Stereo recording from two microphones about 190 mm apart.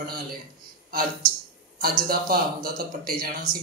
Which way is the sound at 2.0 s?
50° right (ahead or behind).